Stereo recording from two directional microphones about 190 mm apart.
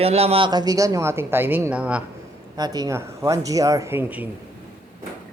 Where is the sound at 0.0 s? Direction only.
30° right (ahead or behind); by 2.0 s 5° right (ahead or behind).